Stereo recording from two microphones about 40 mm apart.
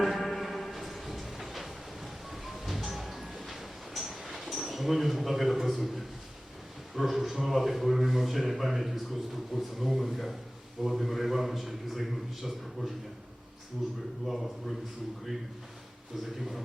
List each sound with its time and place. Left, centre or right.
0.0 s a sound: centre
6.9 s a man's voice: centre
14.3 s a man's voice: centre
16.4 s a man's voice: centre